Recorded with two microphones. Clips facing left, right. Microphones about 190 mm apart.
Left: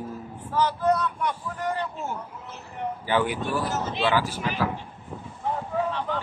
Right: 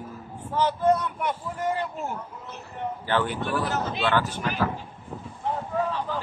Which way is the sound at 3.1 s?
10° left (ahead or behind).